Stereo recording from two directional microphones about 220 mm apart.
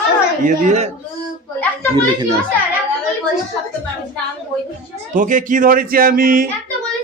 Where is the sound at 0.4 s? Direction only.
35° right (ahead or behind).